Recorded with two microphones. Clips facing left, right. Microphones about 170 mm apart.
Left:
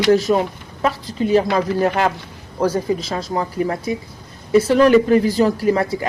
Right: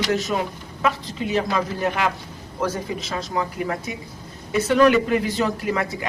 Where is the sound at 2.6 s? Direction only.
35° left (ahead or behind).